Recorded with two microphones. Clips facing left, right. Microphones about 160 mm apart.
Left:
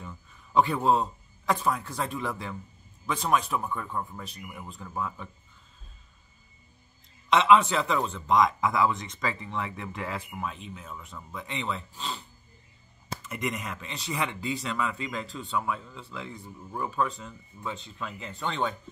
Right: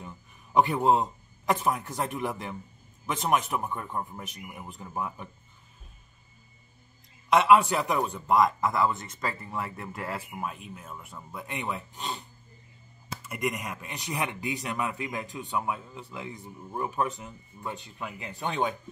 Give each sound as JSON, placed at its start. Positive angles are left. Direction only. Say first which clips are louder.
{"t": 0.0, "sound": "a man's voice", "louder": "even", "side_deg": -15}
{"t": 7.2, "sound": "a man's voice", "louder": "even", "side_deg": -10}
{"t": 13.3, "sound": "speech", "louder": "right 2 dB", "side_deg": -10}